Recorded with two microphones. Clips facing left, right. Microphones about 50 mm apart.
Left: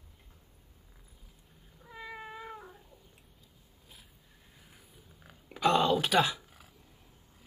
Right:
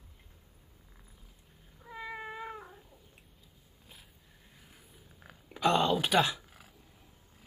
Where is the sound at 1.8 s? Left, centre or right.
Centre.